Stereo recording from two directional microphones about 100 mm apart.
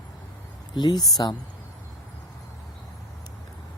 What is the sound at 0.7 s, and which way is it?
Speech, 45° left (ahead or behind).